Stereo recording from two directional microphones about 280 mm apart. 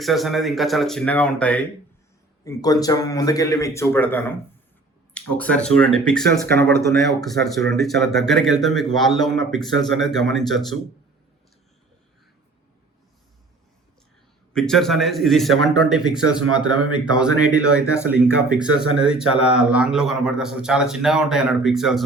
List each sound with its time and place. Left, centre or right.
0.0 s speech: centre
14.5 s speech: centre
19.2 s speech: left
19.5 s speech: centre